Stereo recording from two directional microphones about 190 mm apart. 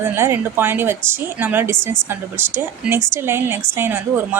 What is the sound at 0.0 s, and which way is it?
A woman's voice, 10° right (ahead or behind).